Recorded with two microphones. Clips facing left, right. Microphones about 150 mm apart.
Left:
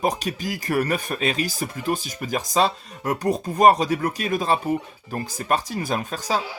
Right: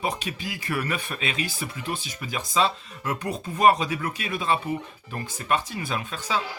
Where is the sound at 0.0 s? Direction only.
40° left (ahead or behind).